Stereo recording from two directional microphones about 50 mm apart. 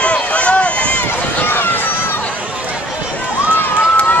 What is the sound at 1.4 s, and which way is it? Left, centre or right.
Run, left.